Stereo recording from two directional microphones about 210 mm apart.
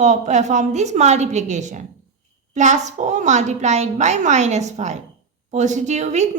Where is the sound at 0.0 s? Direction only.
35° right (ahead or behind).